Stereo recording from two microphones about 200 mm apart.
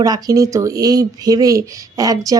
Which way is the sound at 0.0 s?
20° right (ahead or behind).